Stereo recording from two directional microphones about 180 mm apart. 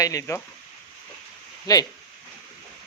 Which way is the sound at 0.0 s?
20° left (ahead or behind).